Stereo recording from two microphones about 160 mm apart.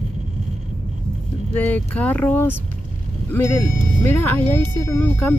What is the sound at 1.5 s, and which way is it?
Speech, 10° left (ahead or behind).